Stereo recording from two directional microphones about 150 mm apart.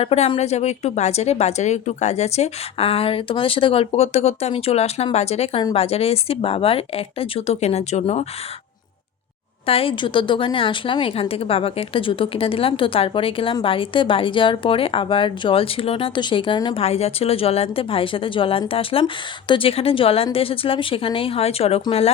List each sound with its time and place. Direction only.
0.0 s a woman's voice: 40° left (ahead or behind)
9.6 s a woman's voice: 40° left (ahead or behind)
16.8 s a woman's voice: 45° left (ahead or behind)